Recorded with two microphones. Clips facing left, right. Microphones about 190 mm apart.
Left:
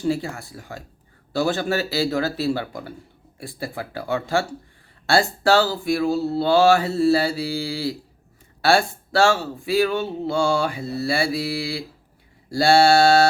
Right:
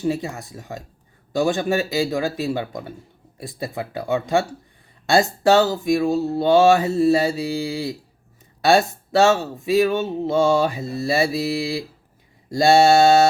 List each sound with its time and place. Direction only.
0.0 s speech: 20° right (ahead or behind)